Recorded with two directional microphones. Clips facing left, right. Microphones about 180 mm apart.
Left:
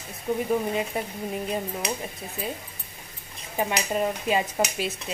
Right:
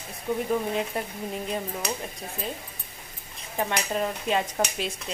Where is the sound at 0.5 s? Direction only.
5° left (ahead or behind).